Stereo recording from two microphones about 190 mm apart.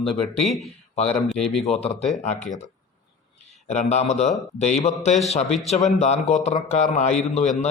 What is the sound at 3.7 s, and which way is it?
A man's voice, 35° left (ahead or behind).